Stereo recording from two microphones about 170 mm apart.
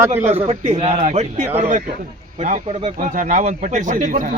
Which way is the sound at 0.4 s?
45° right (ahead or behind).